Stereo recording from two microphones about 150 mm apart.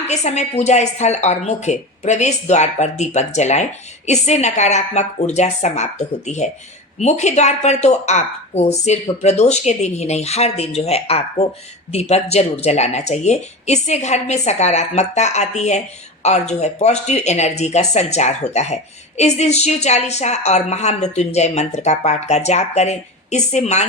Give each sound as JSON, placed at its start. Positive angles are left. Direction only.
{"t": 0.1, "sound": "speech", "side_deg": 45}